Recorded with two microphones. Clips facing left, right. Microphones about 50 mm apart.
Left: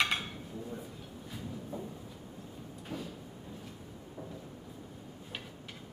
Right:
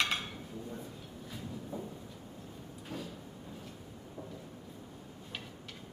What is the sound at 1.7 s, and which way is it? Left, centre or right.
Cupboard open or close, centre.